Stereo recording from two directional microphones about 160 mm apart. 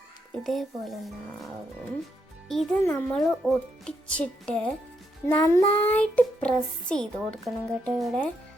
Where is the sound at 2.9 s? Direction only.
10° left (ahead or behind).